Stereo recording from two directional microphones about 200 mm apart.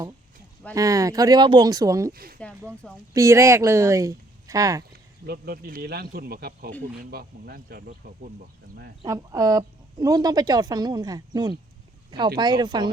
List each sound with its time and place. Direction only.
0.7 s speech: 15° right (ahead or behind)
2.1 s speech: 50° right (ahead or behind)
3.1 s speech: 15° right (ahead or behind)
5.2 s speech: 50° right (ahead or behind)
9.0 s a woman's voice: 15° right (ahead or behind)